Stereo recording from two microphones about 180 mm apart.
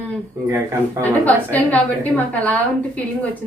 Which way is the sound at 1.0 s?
10° left (ahead or behind).